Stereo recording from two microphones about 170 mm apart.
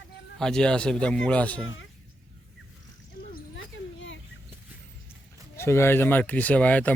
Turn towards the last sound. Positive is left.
turn(degrees=10)  # may be behind; listen again after turning